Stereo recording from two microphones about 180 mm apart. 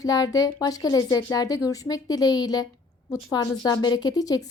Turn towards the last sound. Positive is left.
turn(degrees=20)  # may be behind; listen again after turning